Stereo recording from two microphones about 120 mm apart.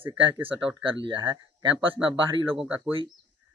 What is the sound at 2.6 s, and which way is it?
Speech, 10° right (ahead or behind).